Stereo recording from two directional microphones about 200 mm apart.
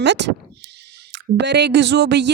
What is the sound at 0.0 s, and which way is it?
Speech, 60° right (ahead or behind).